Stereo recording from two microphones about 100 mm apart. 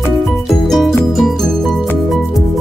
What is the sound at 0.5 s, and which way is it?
Music, centre (ahead or behind).